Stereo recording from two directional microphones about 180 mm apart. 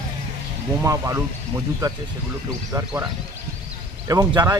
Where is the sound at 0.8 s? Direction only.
15° right (ahead or behind).